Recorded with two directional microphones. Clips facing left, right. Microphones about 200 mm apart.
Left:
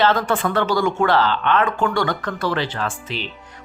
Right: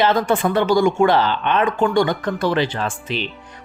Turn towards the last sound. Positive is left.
turn(degrees=-15)  # may be behind; listen again after turning